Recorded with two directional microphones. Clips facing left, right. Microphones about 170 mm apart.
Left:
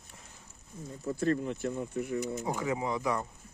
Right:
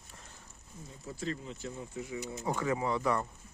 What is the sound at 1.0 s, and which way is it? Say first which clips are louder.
Speech: left 9 dB; 55° left (ahead or behind).